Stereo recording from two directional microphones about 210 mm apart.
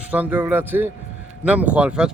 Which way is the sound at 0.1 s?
10° right (ahead or behind).